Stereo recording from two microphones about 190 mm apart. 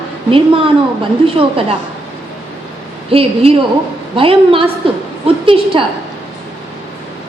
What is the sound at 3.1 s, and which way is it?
A woman's voice, 30° right (ahead or behind).